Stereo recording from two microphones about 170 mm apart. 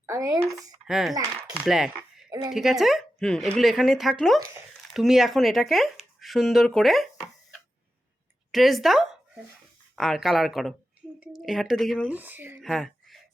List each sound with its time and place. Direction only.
0.0 s speech: 20° right (ahead or behind)
0.9 s speech: centre (ahead or behind)
1.4 s coin: 30° right (ahead or behind)
1.6 s a sound: 5° right (ahead or behind)
2.5 s speech: centre (ahead or behind)
4.4 s speech: 20° right (ahead or behind)
4.9 s speech: centre (ahead or behind)
8.5 s speech: centre (ahead or behind)
12.6 s speech: centre (ahead or behind)